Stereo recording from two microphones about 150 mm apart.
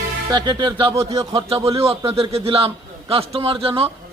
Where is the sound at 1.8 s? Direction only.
40° right (ahead or behind).